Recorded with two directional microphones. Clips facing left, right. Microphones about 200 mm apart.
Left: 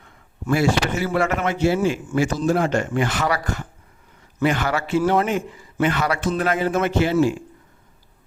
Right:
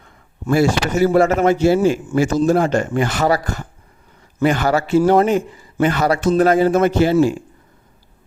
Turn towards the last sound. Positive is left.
turn(degrees=-35)  # may be behind; listen again after turning